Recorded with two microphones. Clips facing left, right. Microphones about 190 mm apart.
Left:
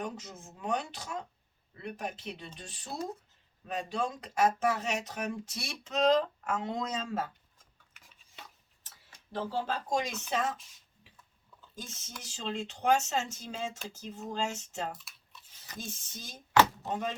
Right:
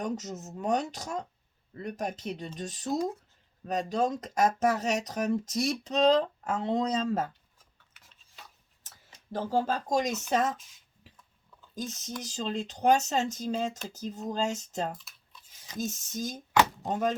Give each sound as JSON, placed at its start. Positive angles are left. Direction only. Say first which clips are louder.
{"t": 0.0, "sound": "speech", "louder": "right 6 dB", "side_deg": -40}
{"t": 9.3, "sound": "speech", "louder": "right 5 dB", "side_deg": -40}
{"t": 11.7, "sound": "speech", "louder": "right 10 dB", "side_deg": -40}
{"t": 14.9, "sound": "a sound", "louder": "right 3 dB", "side_deg": 5}
{"t": 15.8, "sound": "speech", "louder": "right 11 dB", "side_deg": -45}